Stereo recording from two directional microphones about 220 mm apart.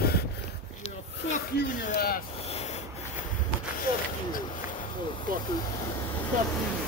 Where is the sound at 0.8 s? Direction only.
35° left (ahead or behind).